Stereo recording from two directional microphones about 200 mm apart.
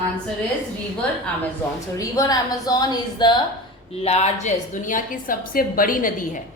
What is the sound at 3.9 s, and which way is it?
A woman's voice, 30° left (ahead or behind).